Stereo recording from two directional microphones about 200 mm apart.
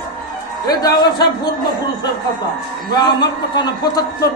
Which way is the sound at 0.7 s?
20° left (ahead or behind).